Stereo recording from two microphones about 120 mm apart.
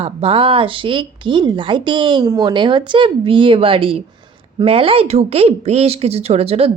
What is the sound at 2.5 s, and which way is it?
Speech, 40° right (ahead or behind).